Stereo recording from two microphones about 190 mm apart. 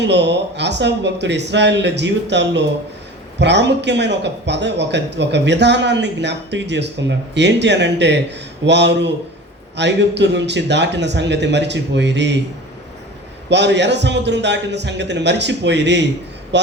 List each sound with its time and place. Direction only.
0.0 s a man's voice: 65° right (ahead or behind)
13.5 s a man's voice: 65° right (ahead or behind)